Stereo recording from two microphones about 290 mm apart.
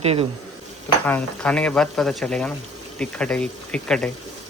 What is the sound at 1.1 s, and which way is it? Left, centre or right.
Speech, centre.